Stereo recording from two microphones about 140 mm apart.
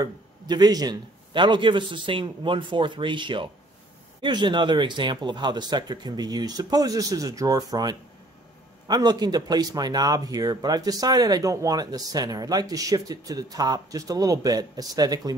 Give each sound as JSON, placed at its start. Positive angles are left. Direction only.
{"t": 0.0, "sound": "a man's voice", "side_deg": -30}